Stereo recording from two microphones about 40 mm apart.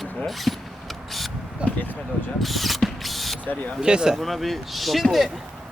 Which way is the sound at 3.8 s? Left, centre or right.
Centre.